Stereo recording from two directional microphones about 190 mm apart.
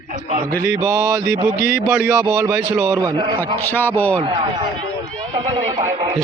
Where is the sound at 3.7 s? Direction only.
10° left (ahead or behind).